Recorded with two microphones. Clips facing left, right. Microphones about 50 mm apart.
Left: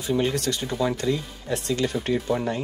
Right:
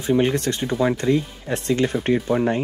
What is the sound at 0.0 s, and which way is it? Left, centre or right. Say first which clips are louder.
Speech: right 5 dB; right.